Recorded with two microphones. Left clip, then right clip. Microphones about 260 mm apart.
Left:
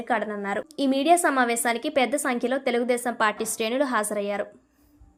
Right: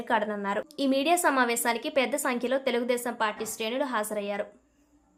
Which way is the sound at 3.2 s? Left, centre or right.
Left.